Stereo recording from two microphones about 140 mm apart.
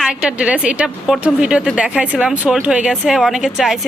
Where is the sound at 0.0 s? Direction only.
5° right (ahead or behind).